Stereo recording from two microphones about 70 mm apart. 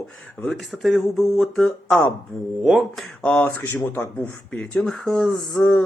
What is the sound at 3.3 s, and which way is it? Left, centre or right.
Speech, left.